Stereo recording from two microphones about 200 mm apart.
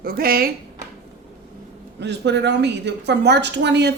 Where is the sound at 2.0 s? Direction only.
60° right (ahead or behind).